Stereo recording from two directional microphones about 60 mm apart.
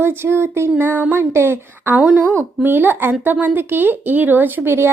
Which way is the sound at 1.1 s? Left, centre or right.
Right.